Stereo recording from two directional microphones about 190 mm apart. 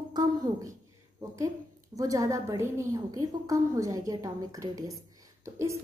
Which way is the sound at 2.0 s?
20° right (ahead or behind).